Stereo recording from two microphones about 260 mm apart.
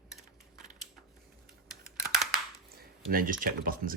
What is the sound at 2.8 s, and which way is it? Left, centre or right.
Speech, right.